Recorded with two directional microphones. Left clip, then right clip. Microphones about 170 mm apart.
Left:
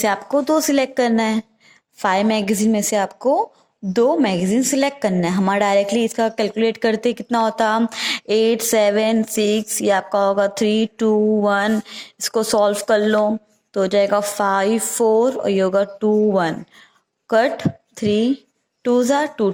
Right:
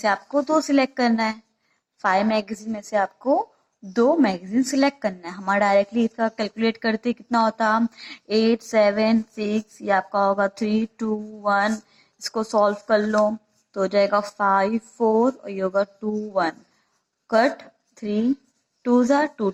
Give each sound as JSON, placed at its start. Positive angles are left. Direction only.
{"t": 0.0, "sound": "a woman's voice", "side_deg": 40}